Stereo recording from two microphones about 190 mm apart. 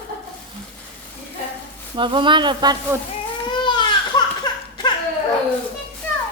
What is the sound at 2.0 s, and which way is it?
Speech, 25° right (ahead or behind).